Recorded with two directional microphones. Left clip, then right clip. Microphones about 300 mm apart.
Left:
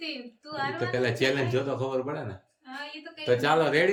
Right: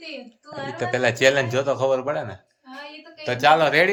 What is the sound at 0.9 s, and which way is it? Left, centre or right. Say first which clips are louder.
Speech: right 10 dB; centre.